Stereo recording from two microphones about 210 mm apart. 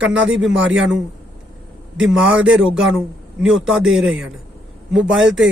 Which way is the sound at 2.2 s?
5° right (ahead or behind).